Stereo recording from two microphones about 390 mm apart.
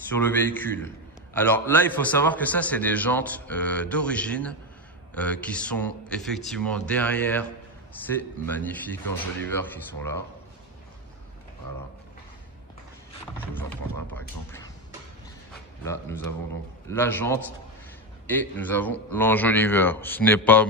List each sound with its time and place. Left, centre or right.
0.1 s a man's voice: centre
15.8 s a man's voice: centre